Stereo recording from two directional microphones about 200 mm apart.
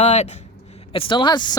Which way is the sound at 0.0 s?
35° left (ahead or behind).